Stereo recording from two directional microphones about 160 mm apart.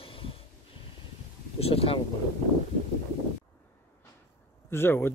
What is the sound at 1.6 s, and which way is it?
Speech, 40° left (ahead or behind).